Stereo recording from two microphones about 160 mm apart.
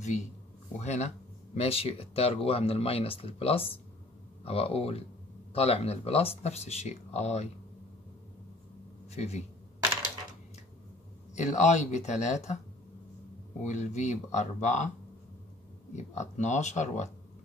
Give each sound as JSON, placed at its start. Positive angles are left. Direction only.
{"t": 0.0, "sound": "speech", "side_deg": 50}
{"t": 9.1, "sound": "speech", "side_deg": 45}
{"t": 11.3, "sound": "speech", "side_deg": 45}
{"t": 13.6, "sound": "speech", "side_deg": 50}
{"t": 16.0, "sound": "speech", "side_deg": 50}